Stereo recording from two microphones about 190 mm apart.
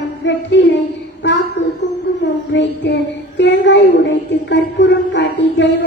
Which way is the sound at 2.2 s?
65° left (ahead or behind).